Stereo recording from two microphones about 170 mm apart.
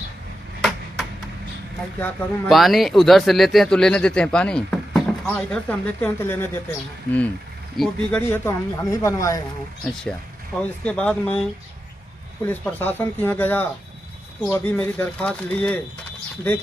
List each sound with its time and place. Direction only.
0.6 s a sound: centre (ahead or behind)
2.0 s speech: 10° left (ahead or behind)
2.5 s speech: centre (ahead or behind)
7.7 s speech: centre (ahead or behind)
8.2 s speech: 15° left (ahead or behind)
10.6 s speech: 10° left (ahead or behind)
12.4 s speech: 10° left (ahead or behind)